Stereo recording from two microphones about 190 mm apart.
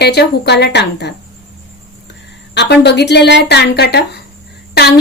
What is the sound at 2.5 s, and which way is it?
Speech, 60° left (ahead or behind).